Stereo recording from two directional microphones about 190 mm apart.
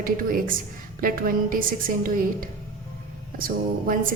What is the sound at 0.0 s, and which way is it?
Speech, 50° right (ahead or behind).